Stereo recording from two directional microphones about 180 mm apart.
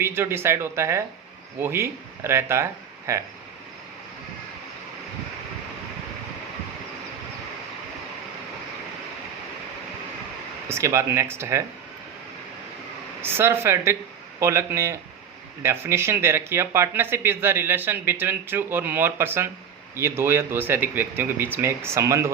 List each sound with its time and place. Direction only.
0.0 s speech: 15° right (ahead or behind)
10.7 s speech: 15° right (ahead or behind)
13.2 s speech: 15° right (ahead or behind)